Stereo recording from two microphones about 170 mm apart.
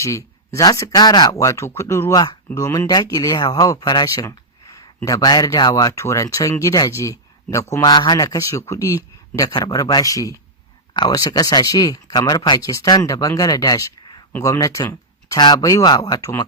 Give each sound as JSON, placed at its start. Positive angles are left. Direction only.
{"t": 0.0, "sound": "speech", "side_deg": 20}